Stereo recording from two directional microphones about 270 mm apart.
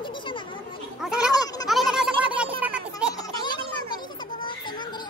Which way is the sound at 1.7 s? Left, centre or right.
Centre.